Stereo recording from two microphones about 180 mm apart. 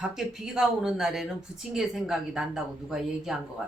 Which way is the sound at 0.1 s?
Centre (ahead or behind).